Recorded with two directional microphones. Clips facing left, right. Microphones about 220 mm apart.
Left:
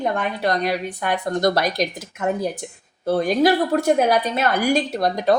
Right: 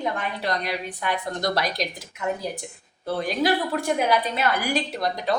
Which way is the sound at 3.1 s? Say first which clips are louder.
Left 6 dB; 45° left (ahead or behind).